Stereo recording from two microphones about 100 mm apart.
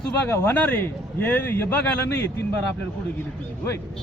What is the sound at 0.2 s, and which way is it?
A man's voice, 20° left (ahead or behind).